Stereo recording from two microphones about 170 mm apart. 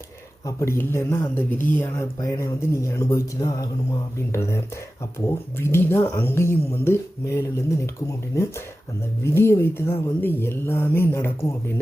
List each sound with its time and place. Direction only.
0.4 s speech: 15° left (ahead or behind)
9.2 s speech: 15° left (ahead or behind)